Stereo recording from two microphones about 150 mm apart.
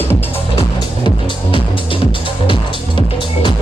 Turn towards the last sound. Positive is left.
turn(degrees=35)  # may be behind; listen again after turning